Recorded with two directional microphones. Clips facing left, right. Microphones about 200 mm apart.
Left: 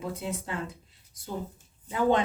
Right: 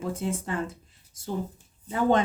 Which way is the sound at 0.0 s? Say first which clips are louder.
Right 4 dB; 50° right (ahead or behind).